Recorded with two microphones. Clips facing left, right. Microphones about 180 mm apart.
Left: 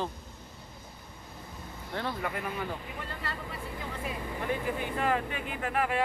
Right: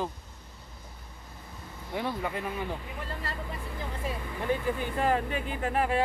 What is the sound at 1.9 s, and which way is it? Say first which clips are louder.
Speech: right 2 dB; 10° right (ahead or behind).